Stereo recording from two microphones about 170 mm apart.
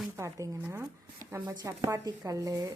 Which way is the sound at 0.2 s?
20° right (ahead or behind).